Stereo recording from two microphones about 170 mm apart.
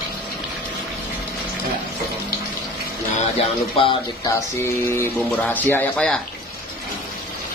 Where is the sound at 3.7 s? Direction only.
30° left (ahead or behind).